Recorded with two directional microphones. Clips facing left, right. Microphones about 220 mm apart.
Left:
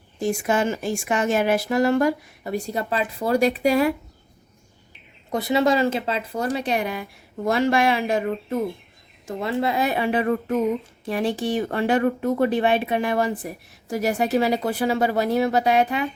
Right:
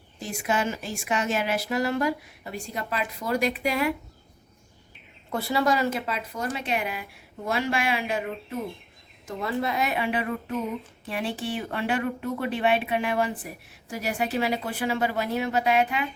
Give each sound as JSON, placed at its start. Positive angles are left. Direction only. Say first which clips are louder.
{"t": 0.2, "sound": "a woman's voice", "louder": "left 6 dB", "side_deg": 50}
{"t": 5.3, "sound": "speech", "louder": "left 5 dB", "side_deg": 20}
{"t": 6.4, "sound": "speech", "louder": "left 5 dB", "side_deg": 35}
{"t": 9.2, "sound": "speech", "louder": "left 4 dB", "side_deg": 25}